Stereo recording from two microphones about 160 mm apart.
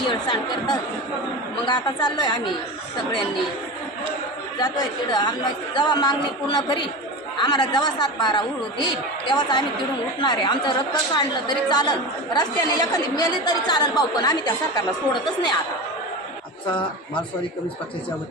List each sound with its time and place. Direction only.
0.1 s a woman's voice: 30° left (ahead or behind)
4.6 s a woman's voice: 25° left (ahead or behind)